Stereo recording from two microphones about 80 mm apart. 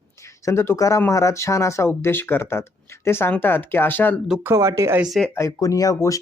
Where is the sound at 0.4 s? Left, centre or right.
Left.